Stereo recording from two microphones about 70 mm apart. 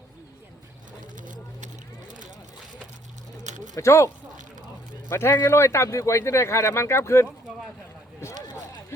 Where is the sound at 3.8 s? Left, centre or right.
Left.